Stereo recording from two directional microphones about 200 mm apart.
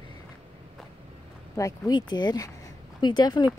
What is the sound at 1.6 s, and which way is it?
Speech, 20° left (ahead or behind).